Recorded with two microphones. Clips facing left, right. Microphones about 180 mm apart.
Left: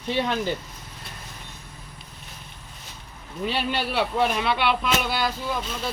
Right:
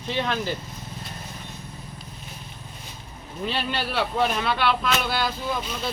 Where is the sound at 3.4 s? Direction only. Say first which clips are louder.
Left 2 dB; 15° left (ahead or behind).